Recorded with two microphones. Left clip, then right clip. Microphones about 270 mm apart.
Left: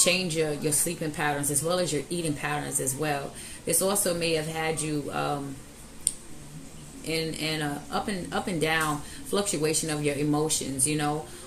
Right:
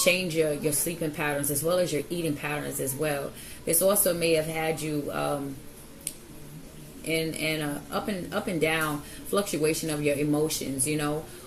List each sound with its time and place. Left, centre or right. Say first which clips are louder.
0.0 s a woman's voice: right 1 dB; left
7.1 s a woman's voice: right 1 dB; centre